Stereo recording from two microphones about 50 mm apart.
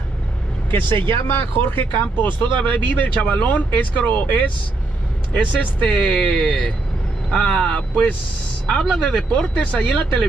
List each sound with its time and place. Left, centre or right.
0.7 s speech: left
6.1 s speech: centre
9.3 s speech: left